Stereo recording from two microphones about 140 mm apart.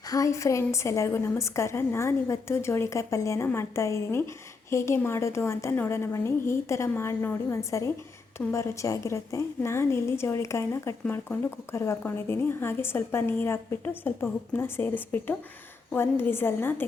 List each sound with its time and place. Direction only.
0.1 s a woman's voice: 25° left (ahead or behind)